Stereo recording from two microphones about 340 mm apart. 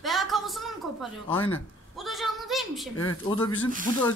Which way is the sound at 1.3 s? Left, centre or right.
Centre.